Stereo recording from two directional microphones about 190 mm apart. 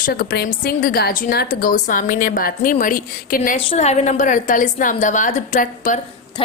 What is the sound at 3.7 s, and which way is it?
A woman's voice, 35° left (ahead or behind).